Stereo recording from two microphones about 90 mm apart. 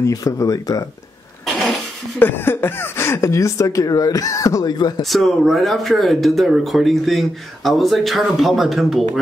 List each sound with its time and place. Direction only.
0.0 s speech: 40° left (ahead or behind)
1.4 s cough: centre (ahead or behind)
2.1 s speech: 25° left (ahead or behind); by 4.7 s 40° left (ahead or behind)
4.7 s speech: 50° left (ahead or behind)
5.0 s speech: centre (ahead or behind)